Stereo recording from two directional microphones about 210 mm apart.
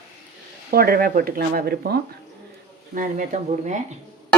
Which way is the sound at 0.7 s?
45° right (ahead or behind).